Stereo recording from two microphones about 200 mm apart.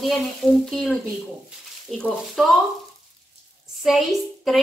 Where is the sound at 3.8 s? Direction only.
Centre (ahead or behind).